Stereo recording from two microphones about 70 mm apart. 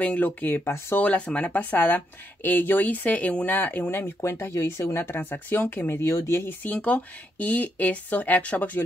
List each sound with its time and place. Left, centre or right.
0.0 s speech: left
1.0 s speech: centre; by 6.5 s left
6.6 s speech: left